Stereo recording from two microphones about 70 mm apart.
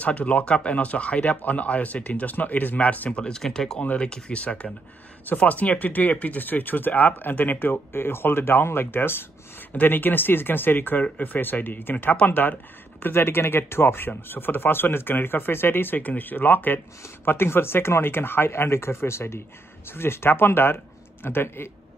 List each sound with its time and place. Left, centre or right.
0.0 s speech: centre
3.8 s speech: centre